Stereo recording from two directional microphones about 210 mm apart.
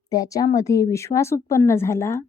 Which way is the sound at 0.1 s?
15° left (ahead or behind).